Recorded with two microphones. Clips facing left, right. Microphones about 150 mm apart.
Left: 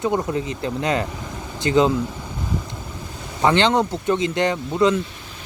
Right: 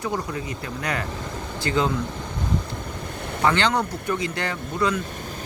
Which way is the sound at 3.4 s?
20° left (ahead or behind).